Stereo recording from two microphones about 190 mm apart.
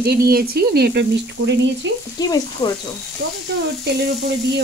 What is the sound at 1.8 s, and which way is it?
Frying, 75° right (ahead or behind).